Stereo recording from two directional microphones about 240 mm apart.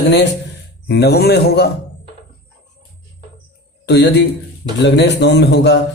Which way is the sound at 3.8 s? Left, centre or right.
Left.